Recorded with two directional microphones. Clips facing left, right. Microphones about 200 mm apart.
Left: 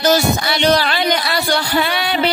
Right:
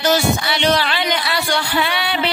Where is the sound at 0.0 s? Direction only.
40° left (ahead or behind).